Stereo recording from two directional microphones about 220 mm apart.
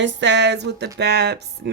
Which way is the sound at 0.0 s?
55° right (ahead or behind).